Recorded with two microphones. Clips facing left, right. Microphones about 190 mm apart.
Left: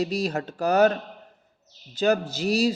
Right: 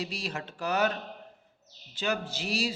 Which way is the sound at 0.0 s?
40° left (ahead or behind).